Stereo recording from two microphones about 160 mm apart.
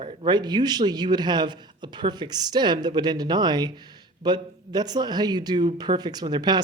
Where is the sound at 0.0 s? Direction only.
30° right (ahead or behind).